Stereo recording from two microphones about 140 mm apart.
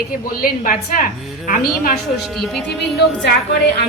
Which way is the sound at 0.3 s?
85° left.